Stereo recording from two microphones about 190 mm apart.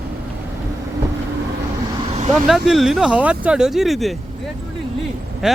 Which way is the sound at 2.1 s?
35° right (ahead or behind).